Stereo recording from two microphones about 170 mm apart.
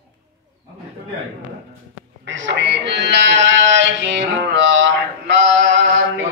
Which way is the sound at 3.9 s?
90° right.